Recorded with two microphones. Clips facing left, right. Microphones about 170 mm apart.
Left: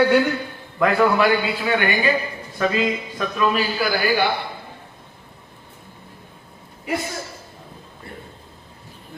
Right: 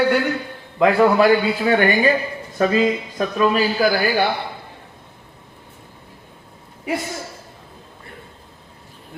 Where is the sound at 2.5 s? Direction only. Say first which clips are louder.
Right 4 dB; 40° right (ahead or behind).